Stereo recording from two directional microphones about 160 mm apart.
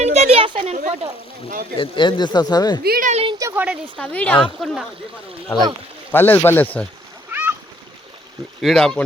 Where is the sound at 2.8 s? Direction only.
70° right (ahead or behind).